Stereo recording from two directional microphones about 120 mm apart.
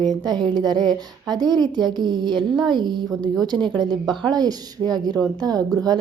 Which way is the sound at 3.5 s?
50° right (ahead or behind).